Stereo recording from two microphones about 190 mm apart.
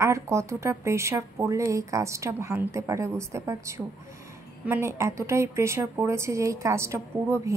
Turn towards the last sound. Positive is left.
turn(degrees=-15)  # may be behind; listen again after turning